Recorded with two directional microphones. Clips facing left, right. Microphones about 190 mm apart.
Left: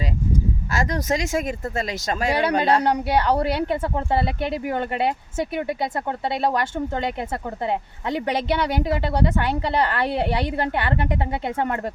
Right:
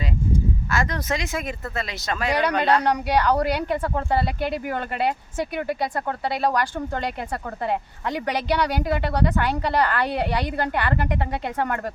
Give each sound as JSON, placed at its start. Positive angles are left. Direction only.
{"t": 0.7, "sound": "speech", "side_deg": 40}
{"t": 2.3, "sound": "speech", "side_deg": 30}
{"t": 6.1, "sound": "speech", "side_deg": 25}